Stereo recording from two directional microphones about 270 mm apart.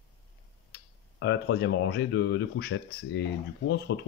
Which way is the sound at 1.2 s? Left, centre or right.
Left.